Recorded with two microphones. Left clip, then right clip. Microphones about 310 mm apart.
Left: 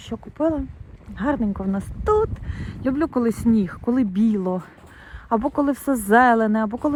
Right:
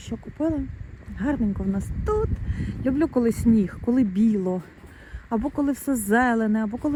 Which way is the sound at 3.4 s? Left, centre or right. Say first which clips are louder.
Left 1 dB; left.